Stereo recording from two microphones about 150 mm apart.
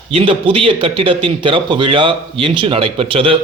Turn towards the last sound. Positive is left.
turn(degrees=-35)  # may be behind; listen again after turning